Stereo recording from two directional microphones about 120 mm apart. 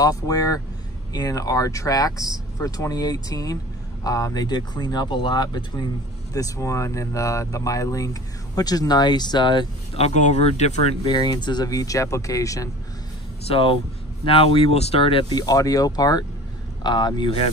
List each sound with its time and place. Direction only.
0.0 s speech: 30° left (ahead or behind)
9.9 s speech: 70° left (ahead or behind)
11.1 s speech: 35° left (ahead or behind)
13.5 s speech: 50° left (ahead or behind)